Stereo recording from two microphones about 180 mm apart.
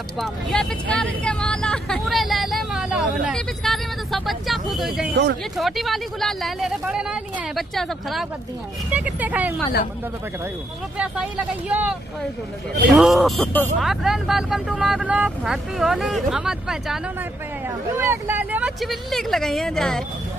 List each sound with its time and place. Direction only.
0.2 s speech: 5° left (ahead or behind)
5.1 s speech: 75° right (ahead or behind)
5.6 s speech: centre (ahead or behind)
11.7 s speech: 10° right (ahead or behind)
17.9 s speech: 15° right (ahead or behind); by 20.0 s centre (ahead or behind)